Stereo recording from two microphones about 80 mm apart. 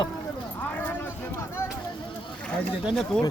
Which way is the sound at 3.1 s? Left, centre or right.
Centre.